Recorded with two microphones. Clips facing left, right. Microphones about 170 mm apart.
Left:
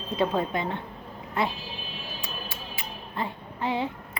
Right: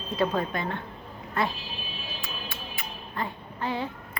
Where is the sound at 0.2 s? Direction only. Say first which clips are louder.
Left 1 dB; 20° left (ahead or behind).